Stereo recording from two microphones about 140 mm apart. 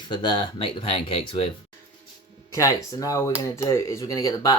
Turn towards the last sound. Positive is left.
turn(degrees=25)  # may be behind; listen again after turning